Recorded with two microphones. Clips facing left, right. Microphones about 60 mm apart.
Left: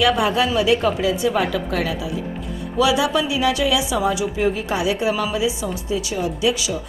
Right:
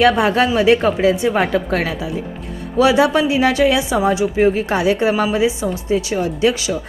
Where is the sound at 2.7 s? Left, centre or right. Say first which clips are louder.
Right 5 dB; right.